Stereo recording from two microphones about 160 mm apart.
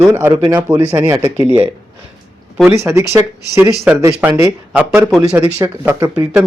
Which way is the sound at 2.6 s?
15° right (ahead or behind).